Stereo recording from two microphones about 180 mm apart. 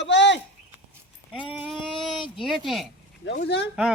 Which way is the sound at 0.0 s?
80° left.